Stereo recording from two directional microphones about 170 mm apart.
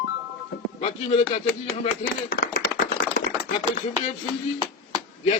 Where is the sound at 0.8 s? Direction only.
40° left (ahead or behind).